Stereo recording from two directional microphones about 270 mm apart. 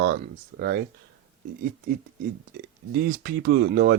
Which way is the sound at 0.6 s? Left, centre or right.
Right.